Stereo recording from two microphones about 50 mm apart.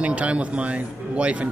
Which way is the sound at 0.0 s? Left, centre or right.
Right.